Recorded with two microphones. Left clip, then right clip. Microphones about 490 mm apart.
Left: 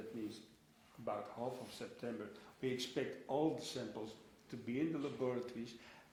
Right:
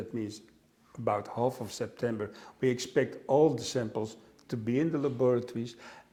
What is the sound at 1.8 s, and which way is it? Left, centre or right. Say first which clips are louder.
Speech: right 15 dB; right.